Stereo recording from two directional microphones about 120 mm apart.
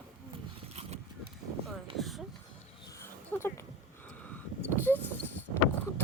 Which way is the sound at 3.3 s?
15° left (ahead or behind).